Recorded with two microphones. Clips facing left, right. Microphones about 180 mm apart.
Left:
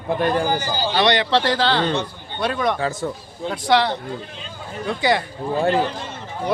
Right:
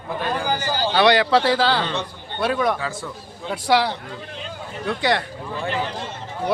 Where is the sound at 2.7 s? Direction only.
40° left (ahead or behind).